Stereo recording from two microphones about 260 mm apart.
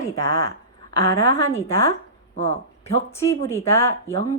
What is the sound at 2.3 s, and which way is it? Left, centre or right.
Speech, left.